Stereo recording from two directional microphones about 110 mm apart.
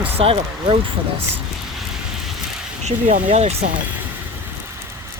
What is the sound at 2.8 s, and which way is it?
Speech, 85° right.